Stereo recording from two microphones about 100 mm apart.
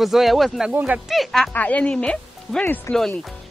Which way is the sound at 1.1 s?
Centre (ahead or behind).